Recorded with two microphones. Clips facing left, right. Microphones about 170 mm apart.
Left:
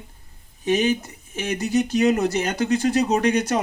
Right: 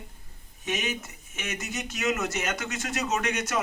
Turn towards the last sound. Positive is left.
turn(degrees=35)  # may be behind; listen again after turning